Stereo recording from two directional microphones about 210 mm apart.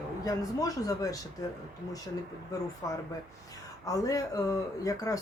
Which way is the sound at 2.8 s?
15° left (ahead or behind).